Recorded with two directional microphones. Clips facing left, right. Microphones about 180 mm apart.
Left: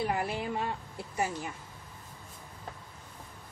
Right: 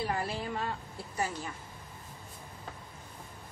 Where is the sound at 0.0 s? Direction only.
15° left (ahead or behind).